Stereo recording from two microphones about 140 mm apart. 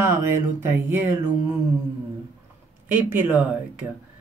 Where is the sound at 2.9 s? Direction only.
15° right (ahead or behind).